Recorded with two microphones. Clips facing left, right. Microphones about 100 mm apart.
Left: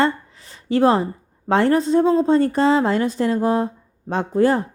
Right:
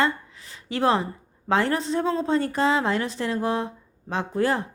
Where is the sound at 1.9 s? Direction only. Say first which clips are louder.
Left 8 dB; 25° left (ahead or behind).